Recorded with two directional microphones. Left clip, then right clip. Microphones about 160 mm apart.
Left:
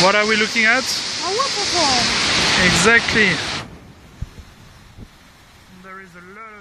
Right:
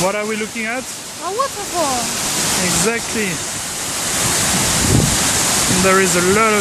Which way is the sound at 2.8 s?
5° right (ahead or behind).